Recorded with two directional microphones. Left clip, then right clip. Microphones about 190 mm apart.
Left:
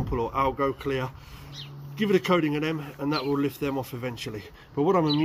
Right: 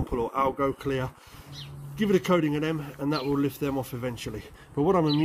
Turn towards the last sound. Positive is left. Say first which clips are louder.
# left 1 dB
turn(degrees=-20)  # may be behind; listen again after turning